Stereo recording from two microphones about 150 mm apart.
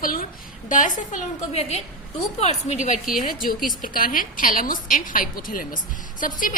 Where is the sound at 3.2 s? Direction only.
70° left (ahead or behind).